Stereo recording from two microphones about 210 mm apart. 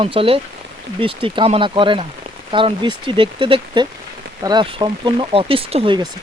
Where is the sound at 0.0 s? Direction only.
25° right (ahead or behind).